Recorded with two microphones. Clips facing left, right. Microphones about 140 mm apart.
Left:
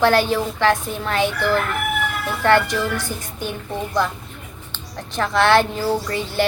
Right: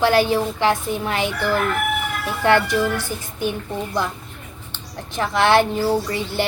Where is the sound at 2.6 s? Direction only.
15° left (ahead or behind).